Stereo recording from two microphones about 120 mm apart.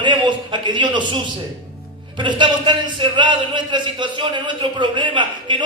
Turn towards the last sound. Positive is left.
turn(degrees=-40)  # may be behind; listen again after turning